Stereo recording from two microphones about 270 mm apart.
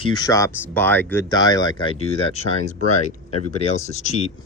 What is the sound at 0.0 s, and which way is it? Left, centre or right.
Speech, centre.